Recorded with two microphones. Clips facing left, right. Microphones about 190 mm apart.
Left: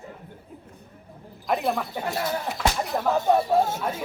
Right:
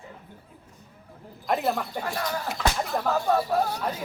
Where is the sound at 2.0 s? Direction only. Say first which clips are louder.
Left 2 dB; 20° left (ahead or behind).